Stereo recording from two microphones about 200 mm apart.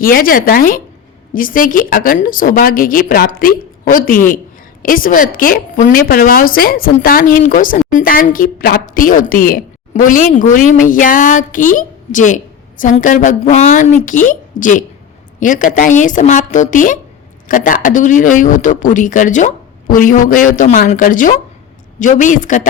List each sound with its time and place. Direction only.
0.0 s a woman's voice: 45° left (ahead or behind)